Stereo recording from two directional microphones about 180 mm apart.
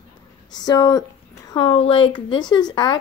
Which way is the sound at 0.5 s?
20° left (ahead or behind).